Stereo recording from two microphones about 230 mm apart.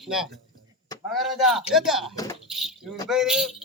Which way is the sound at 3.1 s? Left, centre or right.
Centre.